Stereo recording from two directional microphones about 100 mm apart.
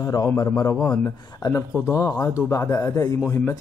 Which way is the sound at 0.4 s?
35° left (ahead or behind).